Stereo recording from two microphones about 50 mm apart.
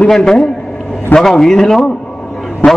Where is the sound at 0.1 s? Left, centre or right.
Centre.